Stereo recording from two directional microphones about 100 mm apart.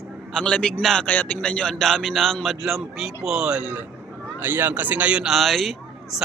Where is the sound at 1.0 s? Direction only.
15° left (ahead or behind).